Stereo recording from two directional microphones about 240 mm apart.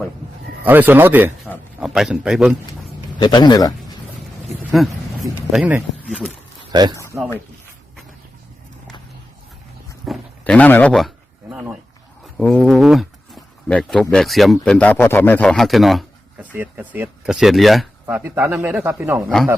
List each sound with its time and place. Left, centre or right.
0.6 s a man's voice: centre
3.2 s speech: centre
4.4 s a sound: centre
5.5 s speech: centre
10.1 s speech: centre
11.4 s a sound: centre
12.2 s speech: centre